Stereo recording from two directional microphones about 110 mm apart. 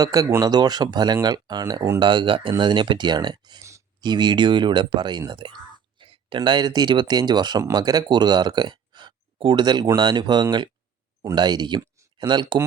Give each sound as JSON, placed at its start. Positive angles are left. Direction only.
{"t": 0.0, "sound": "speech", "side_deg": -30}
{"t": 3.6, "sound": "a sound", "side_deg": -25}
{"t": 4.0, "sound": "speech", "side_deg": -40}